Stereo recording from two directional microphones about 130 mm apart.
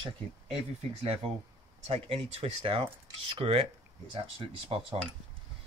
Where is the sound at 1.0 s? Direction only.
50° right (ahead or behind).